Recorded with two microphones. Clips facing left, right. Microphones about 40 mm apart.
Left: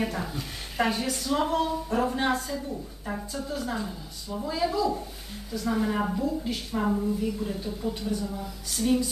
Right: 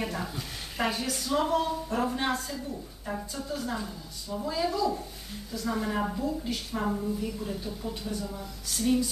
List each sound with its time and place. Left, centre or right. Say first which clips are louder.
0.0 s a woman's voice: left 3 dB; centre